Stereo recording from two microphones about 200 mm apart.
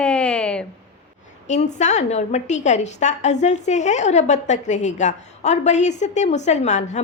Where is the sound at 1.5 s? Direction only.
35° left (ahead or behind).